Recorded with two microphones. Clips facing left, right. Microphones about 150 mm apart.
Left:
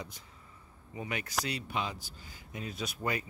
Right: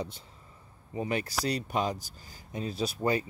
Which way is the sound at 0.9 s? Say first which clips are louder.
Right 5 dB; 35° right (ahead or behind).